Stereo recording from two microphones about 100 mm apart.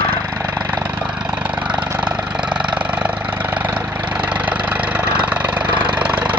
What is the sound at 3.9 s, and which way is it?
Vehicle, 50° right (ahead or behind).